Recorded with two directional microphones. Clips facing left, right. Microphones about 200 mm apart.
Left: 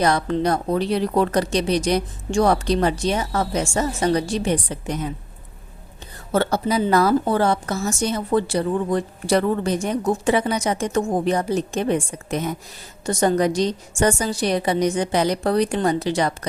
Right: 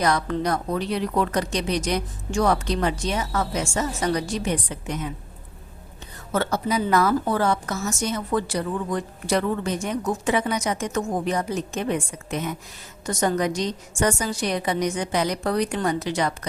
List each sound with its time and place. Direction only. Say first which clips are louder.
0.0 s a woman's voice: left 3 dB; 30° left (ahead or behind)
6.3 s a woman's voice: left 4 dB; 30° left (ahead or behind)